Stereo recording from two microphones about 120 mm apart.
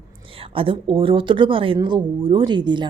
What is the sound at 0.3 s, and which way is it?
A woman's voice, 50° right (ahead or behind).